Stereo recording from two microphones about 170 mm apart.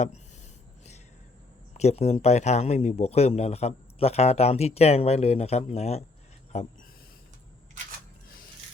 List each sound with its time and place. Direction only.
1.7 s speech: 40° left (ahead or behind)